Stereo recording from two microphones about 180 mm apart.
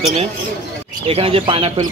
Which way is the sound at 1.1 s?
30° right (ahead or behind).